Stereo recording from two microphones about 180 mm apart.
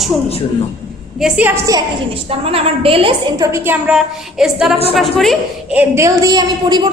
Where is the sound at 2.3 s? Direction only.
35° right (ahead or behind).